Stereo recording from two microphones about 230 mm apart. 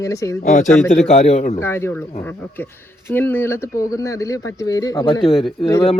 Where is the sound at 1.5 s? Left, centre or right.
Centre.